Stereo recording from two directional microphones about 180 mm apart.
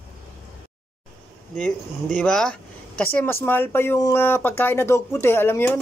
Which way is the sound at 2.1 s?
5° left (ahead or behind).